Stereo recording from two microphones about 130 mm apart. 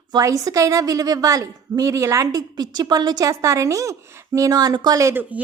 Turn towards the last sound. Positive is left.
turn(degrees=-25)  # may be behind; listen again after turning